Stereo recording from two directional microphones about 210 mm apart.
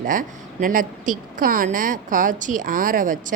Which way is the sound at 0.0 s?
40° right (ahead or behind).